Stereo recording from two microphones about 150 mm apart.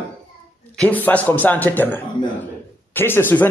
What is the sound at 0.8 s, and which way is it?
A man's voice, 10° left (ahead or behind).